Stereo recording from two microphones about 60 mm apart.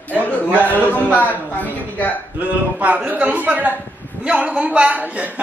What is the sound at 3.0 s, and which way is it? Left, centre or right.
A man's voice, right.